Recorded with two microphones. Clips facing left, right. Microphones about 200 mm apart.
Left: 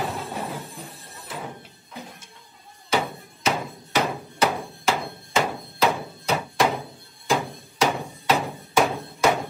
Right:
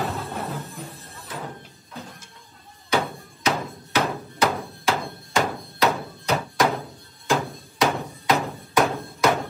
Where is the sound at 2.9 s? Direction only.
5° left (ahead or behind).